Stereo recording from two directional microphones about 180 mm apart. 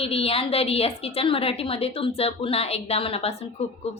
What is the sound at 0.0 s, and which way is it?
A woman's voice, 30° left (ahead or behind).